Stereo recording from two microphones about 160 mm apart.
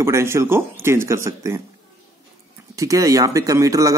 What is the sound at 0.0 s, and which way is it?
Speech, 15° right (ahead or behind).